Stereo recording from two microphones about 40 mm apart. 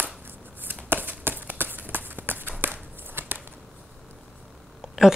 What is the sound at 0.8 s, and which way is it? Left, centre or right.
Run, right.